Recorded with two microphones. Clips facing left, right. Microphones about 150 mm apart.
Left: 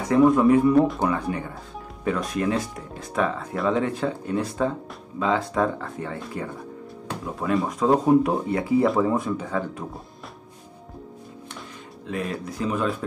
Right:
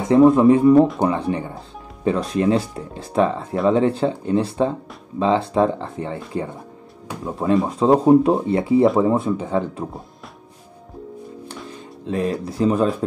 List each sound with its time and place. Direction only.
0.0 s speech: 25° right (ahead or behind)
12.1 s speech: 30° right (ahead or behind)